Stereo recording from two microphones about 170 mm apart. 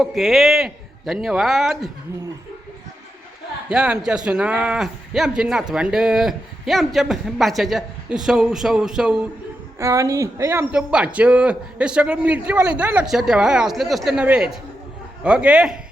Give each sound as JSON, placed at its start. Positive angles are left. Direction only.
{"t": 0.0, "sound": "speech", "side_deg": 0}
{"t": 3.7, "sound": "speech", "side_deg": -5}
{"t": 9.7, "sound": "speech", "side_deg": -15}